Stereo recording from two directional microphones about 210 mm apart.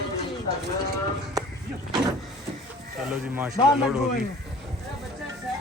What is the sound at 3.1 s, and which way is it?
Speech, 10° right (ahead or behind).